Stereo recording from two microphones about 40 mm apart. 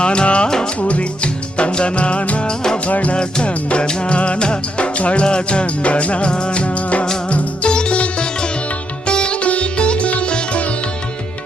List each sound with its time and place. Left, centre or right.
0.0 s music: left